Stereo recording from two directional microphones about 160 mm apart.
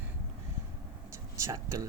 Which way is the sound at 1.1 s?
20° right (ahead or behind).